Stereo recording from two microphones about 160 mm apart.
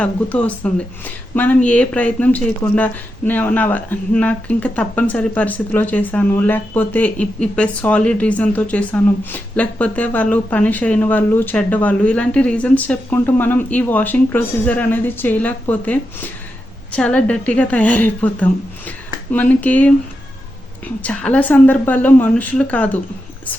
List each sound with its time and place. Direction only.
0.0 s speech: 10° left (ahead or behind)